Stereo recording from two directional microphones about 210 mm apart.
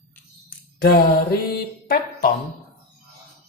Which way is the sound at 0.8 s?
50° left (ahead or behind).